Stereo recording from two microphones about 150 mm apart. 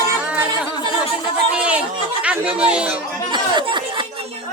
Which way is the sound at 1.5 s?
10° right (ahead or behind).